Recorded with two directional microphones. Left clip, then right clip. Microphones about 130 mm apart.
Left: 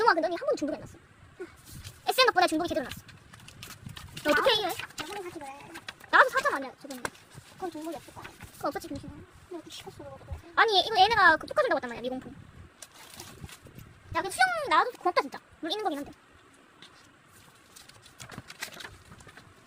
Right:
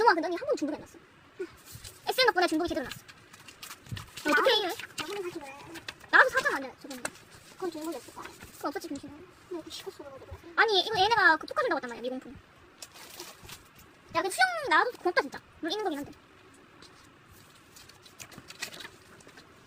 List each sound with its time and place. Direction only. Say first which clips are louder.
0.0 s speech: even; 50° left (ahead or behind)
2.0 s speech: left 2 dB; 50° left (ahead or behind)
4.1 s a child's voice: even; 50° left (ahead or behind)
8.6 s speech: left 2 dB; 45° left (ahead or behind)
10.5 s speech: left 2 dB; 50° left (ahead or behind)
14.1 s a woman's voice: even; 20° left (ahead or behind); by 16.0 s 40° left (ahead or behind)
18.4 s bird: right 1 dB; 30° left (ahead or behind)